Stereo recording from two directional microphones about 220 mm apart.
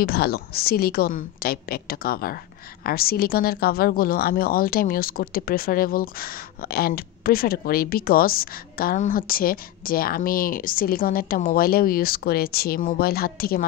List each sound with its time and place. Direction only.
0.0 s a woman's voice: 45° left (ahead or behind)